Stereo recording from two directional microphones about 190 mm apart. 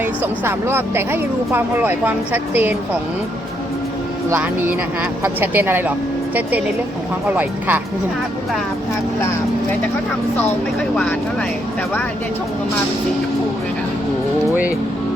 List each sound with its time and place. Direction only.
0.0 s speech: 10° right (ahead or behind)
4.3 s speech: 10° right (ahead or behind)
7.3 s speech: 10° right (ahead or behind)
10.3 s speech: 10° left (ahead or behind)